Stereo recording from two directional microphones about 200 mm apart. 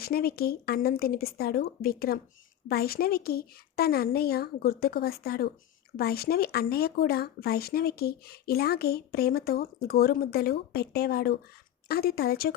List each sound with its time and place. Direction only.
0.0 s speech: 50° left (ahead or behind)